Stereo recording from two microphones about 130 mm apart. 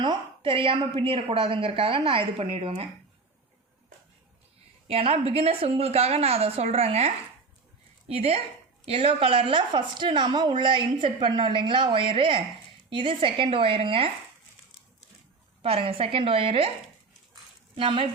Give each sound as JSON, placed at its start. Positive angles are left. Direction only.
{"t": 0.0, "sound": "a sound", "side_deg": -40}
{"t": 0.9, "sound": "a woman's voice", "side_deg": -45}
{"t": 4.9, "sound": "a woman's voice", "side_deg": -50}
{"t": 15.6, "sound": "a woman's voice", "side_deg": -45}
{"t": 17.7, "sound": "a woman's voice", "side_deg": -40}